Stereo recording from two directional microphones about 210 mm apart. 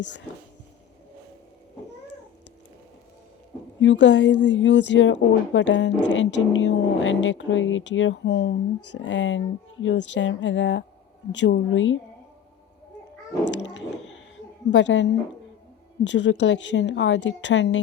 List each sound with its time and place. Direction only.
3.8 s a woman's voice: 60° left (ahead or behind)
13.4 s a sound: 60° left (ahead or behind)
14.7 s a woman's voice: 60° left (ahead or behind)